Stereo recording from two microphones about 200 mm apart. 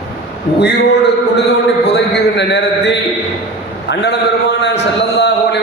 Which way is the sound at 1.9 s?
60° left (ahead or behind).